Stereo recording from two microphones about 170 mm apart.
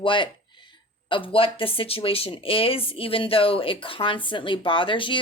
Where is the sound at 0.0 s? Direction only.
30° left (ahead or behind).